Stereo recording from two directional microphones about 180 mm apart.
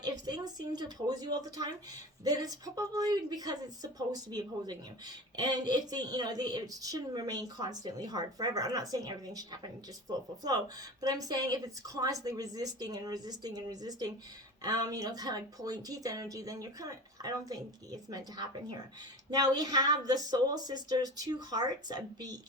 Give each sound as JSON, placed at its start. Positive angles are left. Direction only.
{"t": 0.0, "sound": "a woman's voice", "side_deg": -25}